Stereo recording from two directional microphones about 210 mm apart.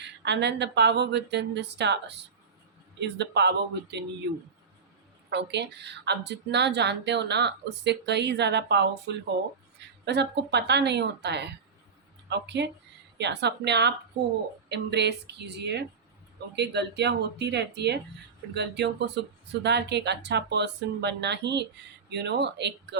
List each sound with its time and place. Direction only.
0.0 s speech: 55° right (ahead or behind)
5.3 s speech: 55° right (ahead or behind)